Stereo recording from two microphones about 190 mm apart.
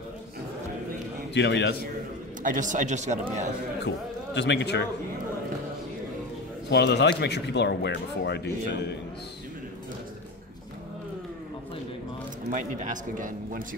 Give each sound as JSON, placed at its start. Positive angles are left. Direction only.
{"t": 1.3, "sound": "speech", "side_deg": 65}
{"t": 2.4, "sound": "speech", "side_deg": -45}
{"t": 3.8, "sound": "a man's voice", "side_deg": 65}
{"t": 6.7, "sound": "speech", "side_deg": 65}
{"t": 12.4, "sound": "a man's voice", "side_deg": -45}